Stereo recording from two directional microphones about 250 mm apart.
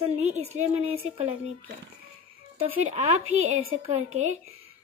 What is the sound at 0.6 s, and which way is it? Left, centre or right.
Speech, right.